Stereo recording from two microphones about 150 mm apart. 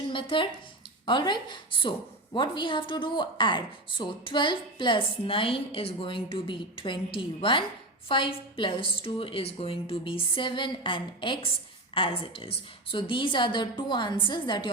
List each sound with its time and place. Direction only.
0.1 s a woman's voice: 35° left (ahead or behind)